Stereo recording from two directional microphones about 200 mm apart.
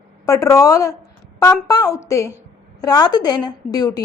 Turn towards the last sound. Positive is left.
turn(degrees=20)  # may be behind; listen again after turning